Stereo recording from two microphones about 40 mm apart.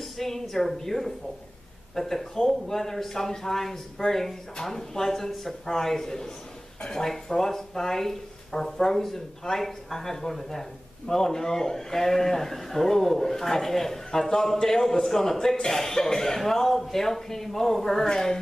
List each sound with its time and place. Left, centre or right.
0.0 s speech: centre